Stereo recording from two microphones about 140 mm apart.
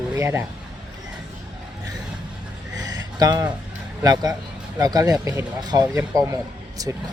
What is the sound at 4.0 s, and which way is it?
Speech, 25° right (ahead or behind).